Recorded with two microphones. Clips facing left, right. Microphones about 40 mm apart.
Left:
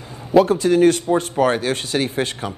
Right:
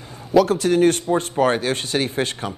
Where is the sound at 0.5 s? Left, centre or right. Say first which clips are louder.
Left 2 dB; right.